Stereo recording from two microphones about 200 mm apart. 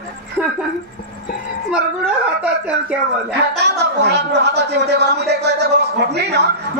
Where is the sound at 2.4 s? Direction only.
5° right (ahead or behind).